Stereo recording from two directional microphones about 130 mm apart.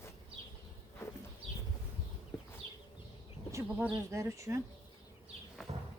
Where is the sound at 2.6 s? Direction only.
45° right (ahead or behind).